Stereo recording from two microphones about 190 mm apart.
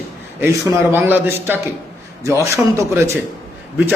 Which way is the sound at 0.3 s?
10° right (ahead or behind).